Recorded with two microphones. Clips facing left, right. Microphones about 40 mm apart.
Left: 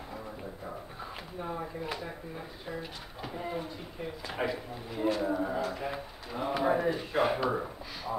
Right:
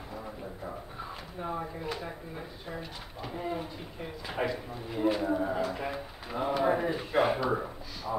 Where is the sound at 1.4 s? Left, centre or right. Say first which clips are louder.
Right 1 dB; centre.